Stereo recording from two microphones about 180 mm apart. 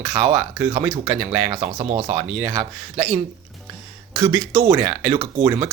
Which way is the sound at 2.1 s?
10° right (ahead or behind).